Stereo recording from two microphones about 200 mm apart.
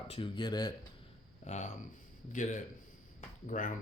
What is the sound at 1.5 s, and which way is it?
Speech, 35° left (ahead or behind).